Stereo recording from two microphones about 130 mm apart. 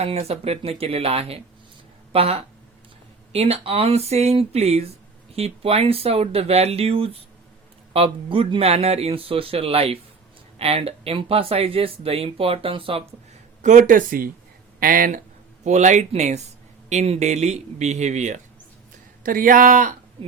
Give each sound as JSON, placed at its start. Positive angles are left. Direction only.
{"t": 0.0, "sound": "speech", "side_deg": -50}
{"t": 13.6, "sound": "speech", "side_deg": -70}
{"t": 15.6, "sound": "speech", "side_deg": -65}
{"t": 19.2, "sound": "speech", "side_deg": -90}